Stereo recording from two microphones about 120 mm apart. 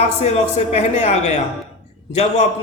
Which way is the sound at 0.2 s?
60° left (ahead or behind).